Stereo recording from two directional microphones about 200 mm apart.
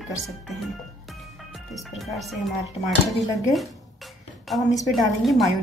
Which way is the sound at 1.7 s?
Centre (ahead or behind).